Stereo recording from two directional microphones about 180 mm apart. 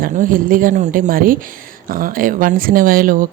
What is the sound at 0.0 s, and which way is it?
Speech, 50° right (ahead or behind).